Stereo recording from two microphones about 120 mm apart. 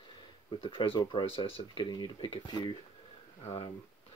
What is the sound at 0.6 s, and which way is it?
Speech, 45° left (ahead or behind).